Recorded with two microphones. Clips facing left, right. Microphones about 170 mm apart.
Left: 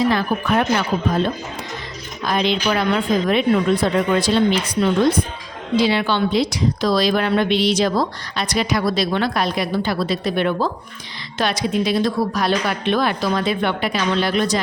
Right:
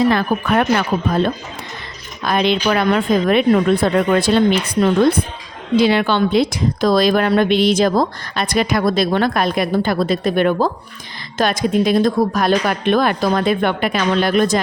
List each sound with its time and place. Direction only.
0.1 s a woman's voice: 55° right (ahead or behind)
2.2 s a woman's voice: 60° right (ahead or behind)